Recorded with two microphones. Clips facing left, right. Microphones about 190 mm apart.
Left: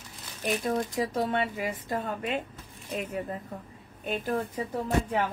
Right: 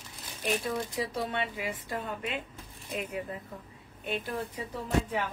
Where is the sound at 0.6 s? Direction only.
45° left (ahead or behind).